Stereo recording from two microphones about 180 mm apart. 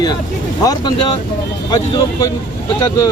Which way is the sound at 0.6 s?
20° left (ahead or behind).